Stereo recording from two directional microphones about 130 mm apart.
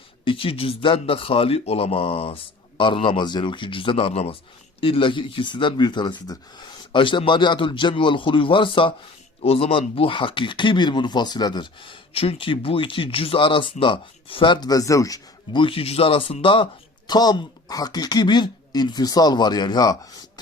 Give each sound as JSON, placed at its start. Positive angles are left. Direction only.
{"t": 0.3, "sound": "speech", "side_deg": 45}
{"t": 15.6, "sound": "speech", "side_deg": 45}